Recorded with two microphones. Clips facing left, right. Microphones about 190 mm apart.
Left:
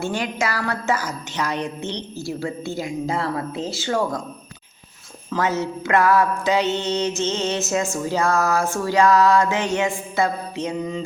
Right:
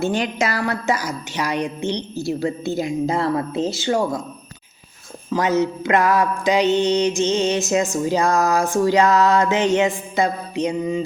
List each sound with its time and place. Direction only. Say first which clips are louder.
0.0 s mantra: right 3 dB; 20° right (ahead or behind)
2.2 s a woman's voice: right 5 dB; 20° right (ahead or behind)
5.3 s mantra: right 4 dB; 15° right (ahead or behind)